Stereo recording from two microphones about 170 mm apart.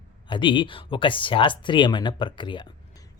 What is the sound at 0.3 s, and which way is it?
Speech, 30° left (ahead or behind).